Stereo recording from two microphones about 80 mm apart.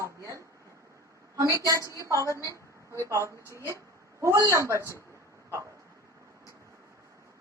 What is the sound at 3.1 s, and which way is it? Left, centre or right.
A man's voice, right.